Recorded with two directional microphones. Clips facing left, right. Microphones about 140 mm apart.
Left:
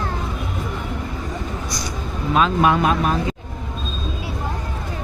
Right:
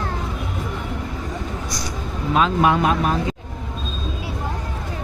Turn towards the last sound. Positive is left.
turn(degrees=-25)  # may be behind; listen again after turning